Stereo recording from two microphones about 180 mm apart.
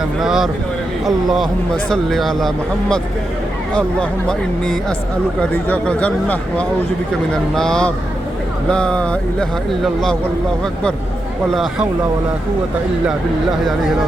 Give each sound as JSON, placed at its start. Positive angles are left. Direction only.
{"t": 0.2, "sound": "speech", "side_deg": 0}
{"t": 4.3, "sound": "speech", "side_deg": 5}
{"t": 11.5, "sound": "speech", "side_deg": 0}